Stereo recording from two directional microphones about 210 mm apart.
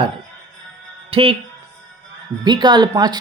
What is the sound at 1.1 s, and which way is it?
Speech, 25° right (ahead or behind).